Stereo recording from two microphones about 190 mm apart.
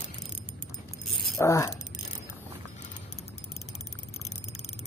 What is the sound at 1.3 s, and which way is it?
Speech, 15° left (ahead or behind).